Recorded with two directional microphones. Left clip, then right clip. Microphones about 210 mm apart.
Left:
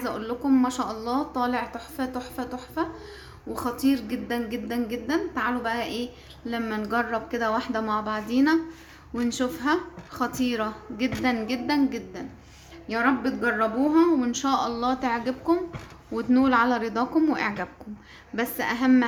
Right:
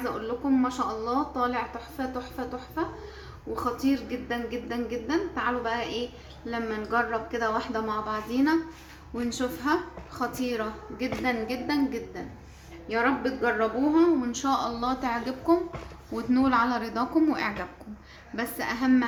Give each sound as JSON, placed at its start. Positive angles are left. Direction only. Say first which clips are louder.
{"t": 0.0, "sound": "a woman's voice", "louder": "left 1 dB", "side_deg": 35}